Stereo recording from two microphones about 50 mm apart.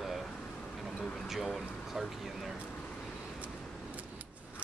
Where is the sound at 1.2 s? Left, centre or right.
Centre.